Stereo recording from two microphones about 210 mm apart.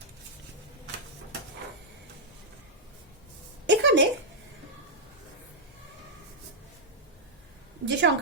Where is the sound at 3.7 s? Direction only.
55° right (ahead or behind).